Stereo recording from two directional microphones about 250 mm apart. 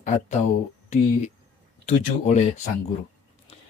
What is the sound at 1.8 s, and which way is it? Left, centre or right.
Speech, left.